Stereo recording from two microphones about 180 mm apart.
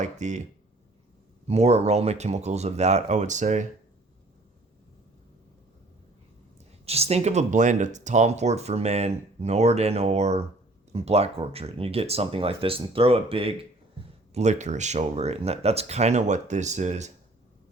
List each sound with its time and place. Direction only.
0.0 s speech: 40° right (ahead or behind)
1.5 s speech: 35° right (ahead or behind)
6.8 s speech: 35° right (ahead or behind)